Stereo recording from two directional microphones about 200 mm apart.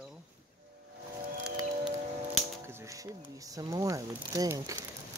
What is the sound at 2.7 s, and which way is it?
Speech, 15° right (ahead or behind).